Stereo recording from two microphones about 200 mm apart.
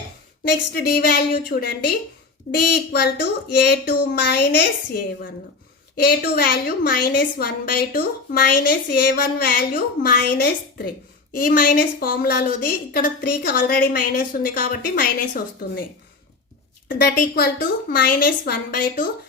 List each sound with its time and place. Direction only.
0.4 s a woman's voice: 50° left (ahead or behind)
6.0 s a woman's voice: 50° left (ahead or behind)
16.9 s a woman's voice: 45° left (ahead or behind)